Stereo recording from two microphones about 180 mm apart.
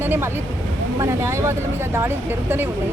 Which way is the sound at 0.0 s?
10° right (ahead or behind).